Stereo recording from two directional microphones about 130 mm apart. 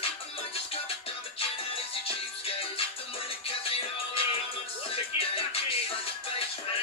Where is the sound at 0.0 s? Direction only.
45° left (ahead or behind).